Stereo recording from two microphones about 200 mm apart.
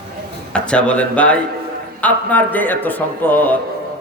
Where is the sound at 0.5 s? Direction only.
5° left (ahead or behind).